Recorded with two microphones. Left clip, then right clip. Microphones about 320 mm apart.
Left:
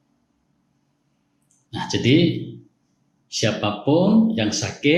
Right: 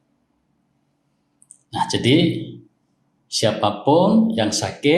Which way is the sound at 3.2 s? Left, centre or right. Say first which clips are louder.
Right 4 dB; centre.